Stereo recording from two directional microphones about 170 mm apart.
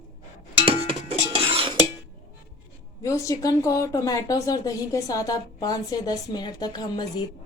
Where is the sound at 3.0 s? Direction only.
20° left (ahead or behind).